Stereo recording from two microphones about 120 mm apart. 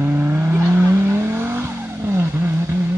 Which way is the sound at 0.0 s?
20° right (ahead or behind).